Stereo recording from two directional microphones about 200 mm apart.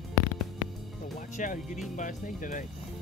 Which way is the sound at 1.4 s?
40° left (ahead or behind).